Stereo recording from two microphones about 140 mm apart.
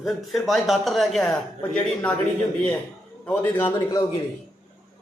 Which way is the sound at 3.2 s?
10° left (ahead or behind).